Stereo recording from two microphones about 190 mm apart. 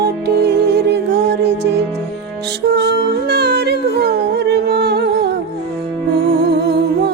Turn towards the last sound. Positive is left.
turn(degrees=-65)  # may be behind; listen again after turning